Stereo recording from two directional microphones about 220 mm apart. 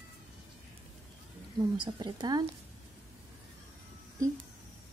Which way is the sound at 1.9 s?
20° right (ahead or behind).